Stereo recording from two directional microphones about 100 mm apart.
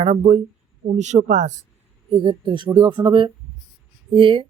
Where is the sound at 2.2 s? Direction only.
55° right (ahead or behind).